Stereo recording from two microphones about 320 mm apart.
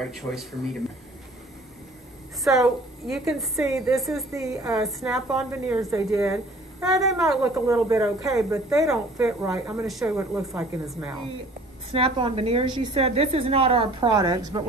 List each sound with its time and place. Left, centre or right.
0.0 s a woman's voice: centre
2.4 s a woman's voice: centre
11.9 s a woman's voice: centre